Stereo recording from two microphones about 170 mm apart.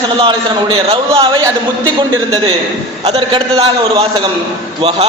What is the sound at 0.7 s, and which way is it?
Speech, 30° right (ahead or behind).